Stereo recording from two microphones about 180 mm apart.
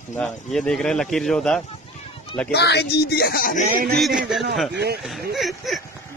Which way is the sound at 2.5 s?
65° left (ahead or behind).